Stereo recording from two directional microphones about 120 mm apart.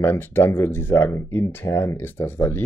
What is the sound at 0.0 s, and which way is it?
Speech, 20° left (ahead or behind).